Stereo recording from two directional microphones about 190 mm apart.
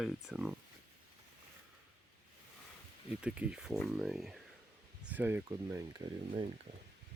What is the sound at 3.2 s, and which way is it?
Speech, 5° right (ahead or behind).